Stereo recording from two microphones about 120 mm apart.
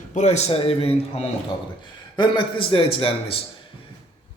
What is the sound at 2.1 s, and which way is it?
A man's voice, 40° left (ahead or behind).